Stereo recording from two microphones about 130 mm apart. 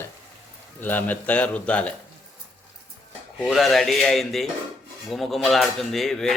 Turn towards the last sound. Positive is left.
turn(degrees=5)  # may be behind; listen again after turning